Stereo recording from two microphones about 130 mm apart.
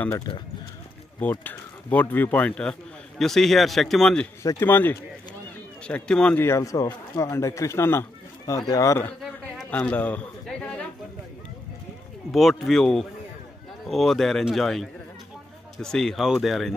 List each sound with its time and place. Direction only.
1.2 s a man's voice: 15° left (ahead or behind)
4.4 s speech: 20° left (ahead or behind)
6.4 s speech: 25° left (ahead or behind)
9.7 s speech: 10° left (ahead or behind)
12.3 s a man's voice: centre (ahead or behind)